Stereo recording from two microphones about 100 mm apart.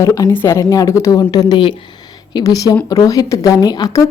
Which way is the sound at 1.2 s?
45° left (ahead or behind).